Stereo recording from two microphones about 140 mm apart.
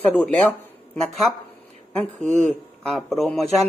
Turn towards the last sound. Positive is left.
turn(degrees=0)  # may be behind; listen again after turning